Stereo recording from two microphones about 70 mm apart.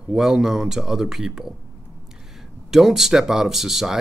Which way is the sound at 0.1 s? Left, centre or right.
Centre.